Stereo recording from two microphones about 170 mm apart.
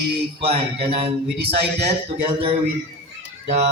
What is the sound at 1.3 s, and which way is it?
Speech, 75° right (ahead or behind).